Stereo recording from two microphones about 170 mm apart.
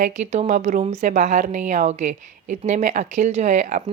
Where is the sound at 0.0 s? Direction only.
45° right (ahead or behind).